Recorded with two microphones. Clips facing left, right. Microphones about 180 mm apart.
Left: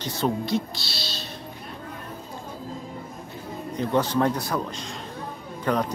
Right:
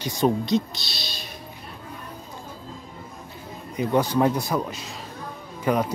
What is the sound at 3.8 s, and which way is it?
Speech, 10° right (ahead or behind).